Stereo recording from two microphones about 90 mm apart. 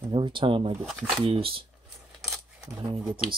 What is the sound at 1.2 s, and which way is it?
Speech, 90° right.